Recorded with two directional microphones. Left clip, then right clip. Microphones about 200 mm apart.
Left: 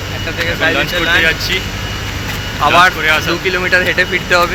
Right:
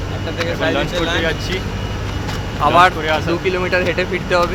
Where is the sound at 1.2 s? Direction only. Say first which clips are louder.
Left 7 dB; 20° right (ahead or behind).